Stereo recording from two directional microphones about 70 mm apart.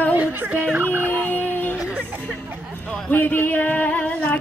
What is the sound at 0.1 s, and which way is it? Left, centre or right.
Turkey, right.